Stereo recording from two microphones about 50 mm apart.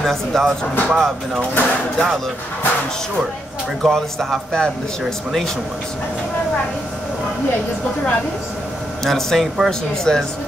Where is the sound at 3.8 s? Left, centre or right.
Centre.